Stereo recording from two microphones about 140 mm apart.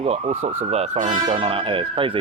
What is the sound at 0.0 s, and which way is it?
Speech, 50° right (ahead or behind).